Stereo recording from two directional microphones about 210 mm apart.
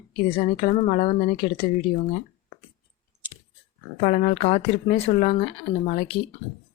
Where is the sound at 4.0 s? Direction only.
35° left (ahead or behind).